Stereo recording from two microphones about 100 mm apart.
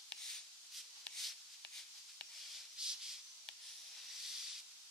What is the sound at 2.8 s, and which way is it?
Rub, 5° right (ahead or behind).